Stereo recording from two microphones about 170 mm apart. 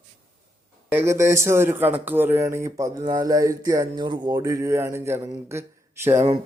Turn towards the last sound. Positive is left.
turn(degrees=-15)  # may be behind; listen again after turning